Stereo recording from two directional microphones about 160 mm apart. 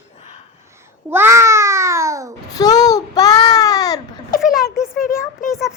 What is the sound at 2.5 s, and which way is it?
A child's voice, 25° left (ahead or behind).